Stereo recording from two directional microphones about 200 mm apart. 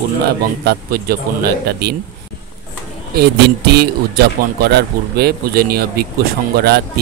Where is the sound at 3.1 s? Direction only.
55° right (ahead or behind).